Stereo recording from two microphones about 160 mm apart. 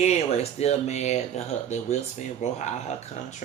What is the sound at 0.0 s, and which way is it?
A man's voice, 45° left (ahead or behind).